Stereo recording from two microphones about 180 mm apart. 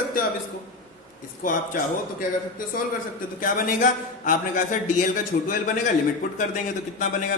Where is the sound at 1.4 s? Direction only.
50° left (ahead or behind).